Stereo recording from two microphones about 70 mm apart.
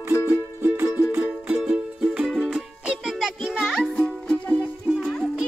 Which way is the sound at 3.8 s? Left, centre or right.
Centre.